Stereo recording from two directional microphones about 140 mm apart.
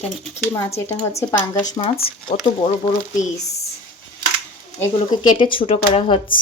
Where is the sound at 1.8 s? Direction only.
40° left (ahead or behind).